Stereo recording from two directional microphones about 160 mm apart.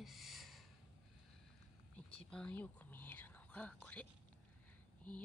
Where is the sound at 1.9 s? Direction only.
5° left (ahead or behind).